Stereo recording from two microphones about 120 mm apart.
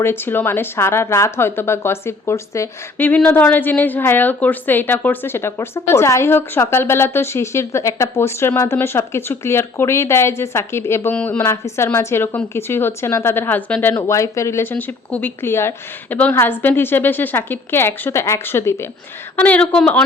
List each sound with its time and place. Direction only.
0.0 s a woman's voice: 20° left (ahead or behind)
3.1 s a woman's voice: 10° left (ahead or behind)
14.1 s a woman's voice: 25° left (ahead or behind)
19.4 s a woman's voice: 10° left (ahead or behind)